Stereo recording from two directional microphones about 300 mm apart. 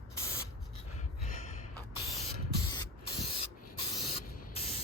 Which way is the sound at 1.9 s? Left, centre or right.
Centre.